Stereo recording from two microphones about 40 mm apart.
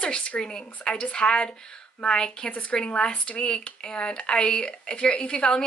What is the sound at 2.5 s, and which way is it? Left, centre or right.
Speech, left.